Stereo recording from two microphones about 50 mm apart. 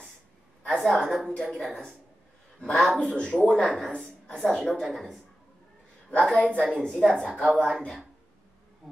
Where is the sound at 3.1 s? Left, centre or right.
Centre.